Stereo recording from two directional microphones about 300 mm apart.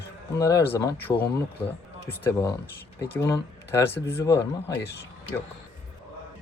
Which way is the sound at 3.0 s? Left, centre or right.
Centre.